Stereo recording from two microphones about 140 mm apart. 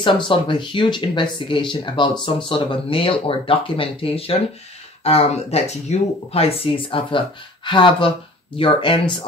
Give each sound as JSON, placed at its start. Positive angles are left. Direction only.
{"t": 0.0, "sound": "speech", "side_deg": 35}